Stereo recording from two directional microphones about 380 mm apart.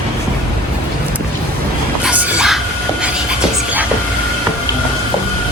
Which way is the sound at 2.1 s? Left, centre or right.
Centre.